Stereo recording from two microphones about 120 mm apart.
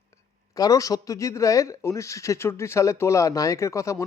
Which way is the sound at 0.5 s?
30° left (ahead or behind).